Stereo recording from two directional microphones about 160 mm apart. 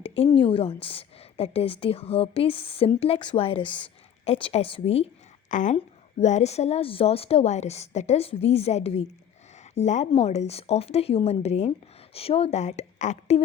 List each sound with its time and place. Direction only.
0.0 s a woman's voice: 35° left (ahead or behind)
5.5 s a woman's voice: 50° left (ahead or behind)